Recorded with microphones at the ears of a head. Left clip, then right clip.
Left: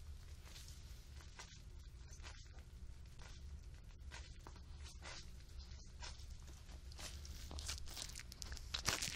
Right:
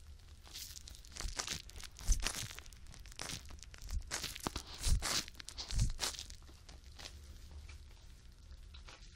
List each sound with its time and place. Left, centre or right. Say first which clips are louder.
0.5 s crumpling: right 11 dB; right
4.1 s tearing: right 16 dB; right
7.5 s walk: left 17 dB; left